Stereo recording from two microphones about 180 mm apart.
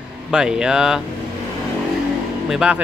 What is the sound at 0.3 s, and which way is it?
Speech, 5° right (ahead or behind).